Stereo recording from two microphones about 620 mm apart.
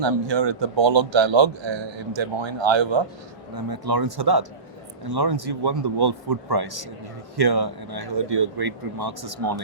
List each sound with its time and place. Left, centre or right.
0.0 s a man's voice: right